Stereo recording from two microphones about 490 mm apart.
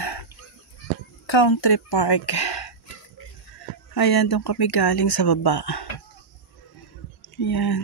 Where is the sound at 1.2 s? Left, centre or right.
Left.